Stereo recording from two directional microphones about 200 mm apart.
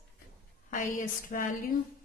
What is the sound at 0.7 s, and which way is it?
Speech, 40° left (ahead or behind).